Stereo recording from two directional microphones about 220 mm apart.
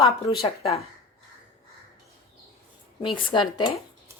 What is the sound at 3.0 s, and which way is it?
Speech, 20° left (ahead or behind).